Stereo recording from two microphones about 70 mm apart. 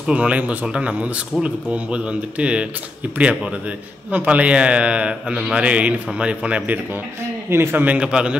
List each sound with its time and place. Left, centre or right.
0.0 s a man's voice: centre
4.1 s a man's voice: right
7.4 s speech: right; by 8.4 s centre